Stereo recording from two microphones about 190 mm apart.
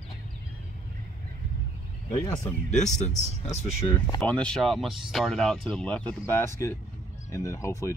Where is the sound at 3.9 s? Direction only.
25° left (ahead or behind).